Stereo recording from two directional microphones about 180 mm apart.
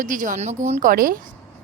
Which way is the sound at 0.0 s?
45° right (ahead or behind).